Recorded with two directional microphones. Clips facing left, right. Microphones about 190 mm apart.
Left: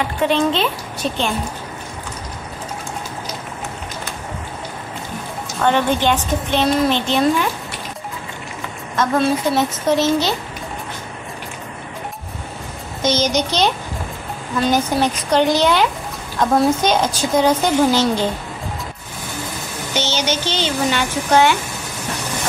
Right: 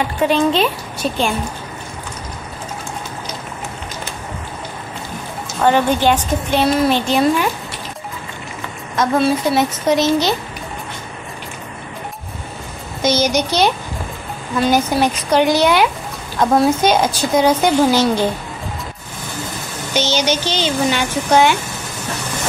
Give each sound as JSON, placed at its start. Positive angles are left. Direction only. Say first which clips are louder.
{"t": 0.3, "sound": "speech", "louder": "right 3 dB", "side_deg": -10}
{"t": 5.6, "sound": "speech", "louder": "right 2 dB", "side_deg": -10}
{"t": 8.9, "sound": "speech", "louder": "right 2 dB", "side_deg": -10}
{"t": 13.0, "sound": "speech", "louder": "right 2 dB", "side_deg": -10}
{"t": 14.7, "sound": "speech", "louder": "right 2 dB", "side_deg": -10}
{"t": 20.0, "sound": "speech", "louder": "right 3 dB", "side_deg": -15}